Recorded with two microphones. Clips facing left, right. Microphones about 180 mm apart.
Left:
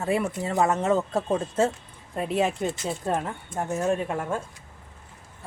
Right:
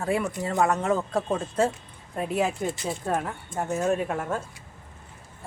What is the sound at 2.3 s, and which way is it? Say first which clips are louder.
Speech: left 1 dB; 25° left (ahead or behind).